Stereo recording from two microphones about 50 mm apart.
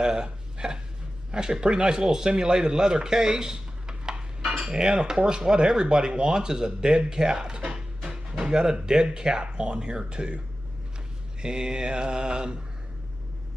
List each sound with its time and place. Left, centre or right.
0.0 s a sound: centre
1.3 s speech: centre
11.4 s speech: centre